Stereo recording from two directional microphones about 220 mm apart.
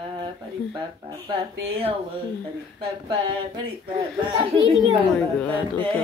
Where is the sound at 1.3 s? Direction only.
25° right (ahead or behind).